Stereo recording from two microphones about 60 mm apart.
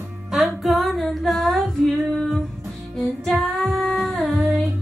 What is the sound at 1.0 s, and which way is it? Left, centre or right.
Humming, centre.